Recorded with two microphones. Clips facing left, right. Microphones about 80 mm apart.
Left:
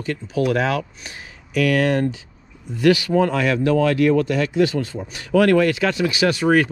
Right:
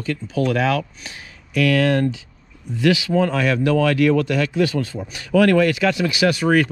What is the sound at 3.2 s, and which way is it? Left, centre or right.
Speech, left.